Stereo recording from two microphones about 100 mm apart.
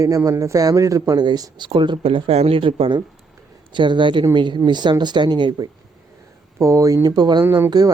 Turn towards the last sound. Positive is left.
turn(degrees=-25)  # may be behind; listen again after turning